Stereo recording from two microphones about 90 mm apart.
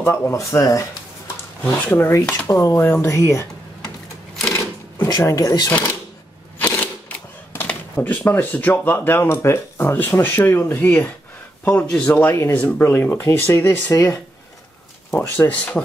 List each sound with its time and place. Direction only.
0.0 s speech: 25° left (ahead or behind)
1.6 s speech: 20° left (ahead or behind)
4.5 s sewing machine: 30° left (ahead or behind)
5.2 s speech: 35° left (ahead or behind)
5.7 s speech: 20° left (ahead or behind)
6.6 s camera: 20° left (ahead or behind)
10.2 s speech: 25° left (ahead or behind)
12.1 s speech: 20° left (ahead or behind)
15.1 s speech: 20° left (ahead or behind)